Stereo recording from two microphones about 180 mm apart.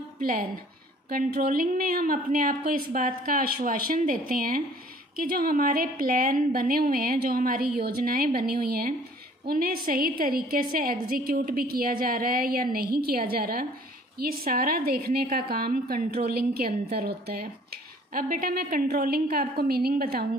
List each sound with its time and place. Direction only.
0.2 s a woman's voice: 55° right (ahead or behind)